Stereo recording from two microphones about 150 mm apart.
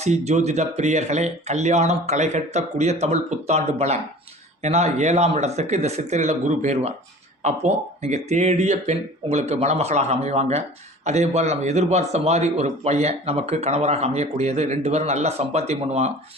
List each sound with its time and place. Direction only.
0.0 s a man's voice: 50° right (ahead or behind)